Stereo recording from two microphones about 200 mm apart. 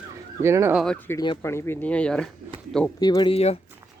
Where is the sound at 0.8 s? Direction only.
5° left (ahead or behind).